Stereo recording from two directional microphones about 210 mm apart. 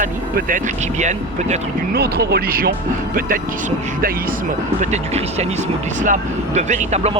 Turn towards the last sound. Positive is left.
turn(degrees=-30)  # may be behind; listen again after turning